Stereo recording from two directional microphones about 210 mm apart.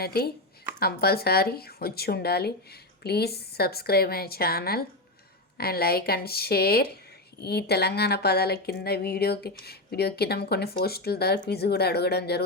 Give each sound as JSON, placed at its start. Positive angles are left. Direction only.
{"t": 0.0, "sound": "speech", "side_deg": 50}